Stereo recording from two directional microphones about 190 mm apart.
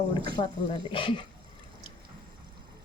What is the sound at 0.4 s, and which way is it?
Speech, 30° left (ahead or behind).